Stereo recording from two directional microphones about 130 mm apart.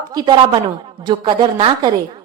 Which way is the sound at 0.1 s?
35° right (ahead or behind).